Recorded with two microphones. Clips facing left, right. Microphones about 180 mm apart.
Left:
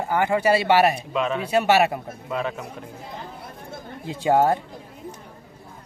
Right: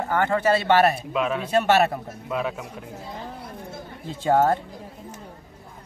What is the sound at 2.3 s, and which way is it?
Speech, 5° right (ahead or behind).